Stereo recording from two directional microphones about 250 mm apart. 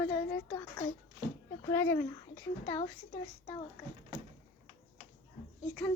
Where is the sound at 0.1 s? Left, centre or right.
Centre.